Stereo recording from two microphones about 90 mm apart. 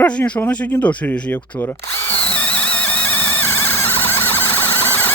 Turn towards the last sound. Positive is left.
turn(degrees=20)  # may be behind; listen again after turning